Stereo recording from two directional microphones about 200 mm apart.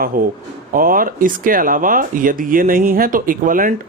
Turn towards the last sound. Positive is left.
turn(degrees=-45)  # may be behind; listen again after turning